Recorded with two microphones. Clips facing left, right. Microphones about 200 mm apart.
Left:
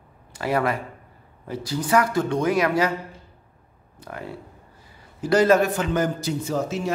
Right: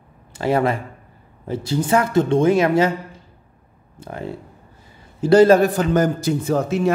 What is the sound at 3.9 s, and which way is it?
A man's voice, 25° right (ahead or behind).